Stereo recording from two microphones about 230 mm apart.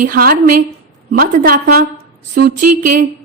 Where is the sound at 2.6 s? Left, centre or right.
Right.